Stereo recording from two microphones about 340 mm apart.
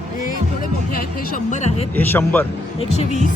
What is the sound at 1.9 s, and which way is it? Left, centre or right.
Speech, centre.